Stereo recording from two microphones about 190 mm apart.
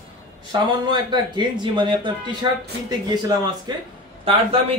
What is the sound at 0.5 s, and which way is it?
A man's voice, 25° right (ahead or behind).